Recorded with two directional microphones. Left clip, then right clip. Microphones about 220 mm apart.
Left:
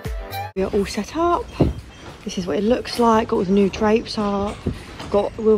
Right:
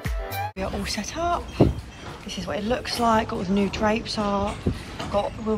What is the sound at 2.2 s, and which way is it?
Speech, 5° right (ahead or behind).